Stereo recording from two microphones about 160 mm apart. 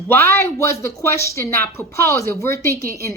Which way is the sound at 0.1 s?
15° left (ahead or behind).